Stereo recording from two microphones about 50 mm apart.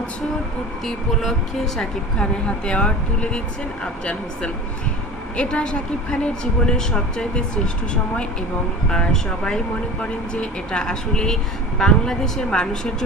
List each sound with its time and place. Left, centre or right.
0.9 s speech: centre
2.1 s a woman's voice: centre
8.9 s speech: centre